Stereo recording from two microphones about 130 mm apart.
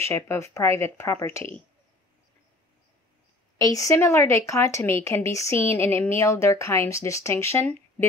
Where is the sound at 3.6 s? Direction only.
25° left (ahead or behind).